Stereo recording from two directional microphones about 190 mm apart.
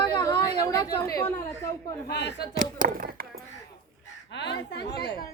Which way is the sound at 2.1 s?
60° left (ahead or behind).